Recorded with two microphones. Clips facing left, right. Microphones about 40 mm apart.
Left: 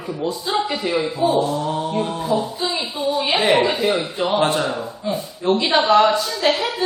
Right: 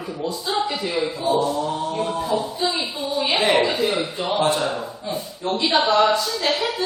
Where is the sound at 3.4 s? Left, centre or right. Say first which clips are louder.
Left 2 dB; centre.